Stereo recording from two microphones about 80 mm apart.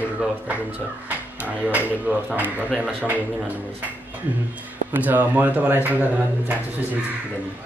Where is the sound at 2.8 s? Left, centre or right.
Right.